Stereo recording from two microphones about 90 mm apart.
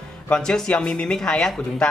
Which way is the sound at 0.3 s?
10° left (ahead or behind).